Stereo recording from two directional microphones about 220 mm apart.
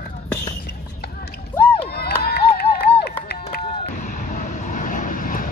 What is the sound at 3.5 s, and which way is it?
Vehicle, 40° left (ahead or behind).